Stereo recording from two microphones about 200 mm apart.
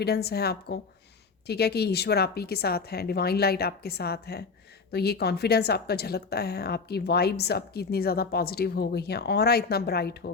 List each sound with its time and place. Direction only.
0.0 s speech: 55° left (ahead or behind)